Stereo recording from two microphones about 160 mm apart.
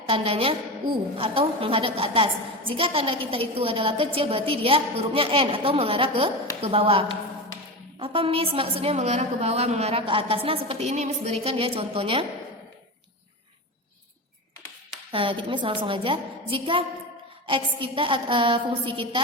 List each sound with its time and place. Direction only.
0.1 s a woman's voice: 35° right (ahead or behind)
15.1 s a woman's voice: 35° right (ahead or behind)